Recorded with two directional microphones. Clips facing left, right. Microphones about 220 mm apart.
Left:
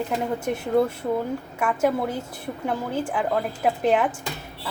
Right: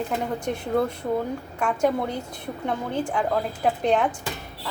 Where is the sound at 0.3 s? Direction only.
5° left (ahead or behind).